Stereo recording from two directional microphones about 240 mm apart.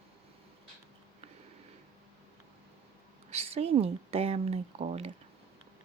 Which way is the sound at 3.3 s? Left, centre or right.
Right.